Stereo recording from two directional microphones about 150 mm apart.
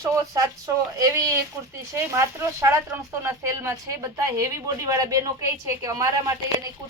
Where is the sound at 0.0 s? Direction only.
25° right (ahead or behind).